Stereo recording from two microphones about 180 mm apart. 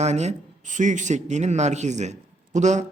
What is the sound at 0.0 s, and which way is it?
Speech, 40° right (ahead or behind).